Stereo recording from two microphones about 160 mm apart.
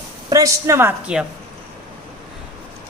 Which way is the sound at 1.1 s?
5° right (ahead or behind).